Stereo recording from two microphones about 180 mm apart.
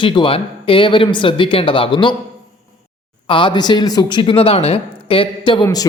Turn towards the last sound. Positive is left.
turn(degrees=20)  # may be behind; listen again after turning